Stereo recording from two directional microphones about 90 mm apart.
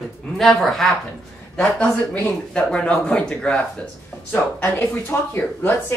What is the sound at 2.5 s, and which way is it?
Speech, 10° left (ahead or behind).